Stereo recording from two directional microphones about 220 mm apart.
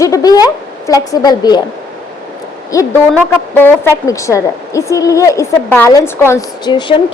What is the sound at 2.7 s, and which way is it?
A woman's voice, 15° left (ahead or behind).